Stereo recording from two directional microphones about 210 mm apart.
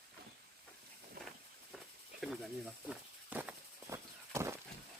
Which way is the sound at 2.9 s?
5° right (ahead or behind).